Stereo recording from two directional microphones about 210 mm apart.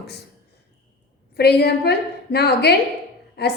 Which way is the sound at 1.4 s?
50° left (ahead or behind).